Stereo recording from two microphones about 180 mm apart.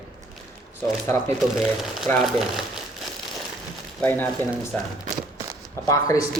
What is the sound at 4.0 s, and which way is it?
Speech, 10° left (ahead or behind).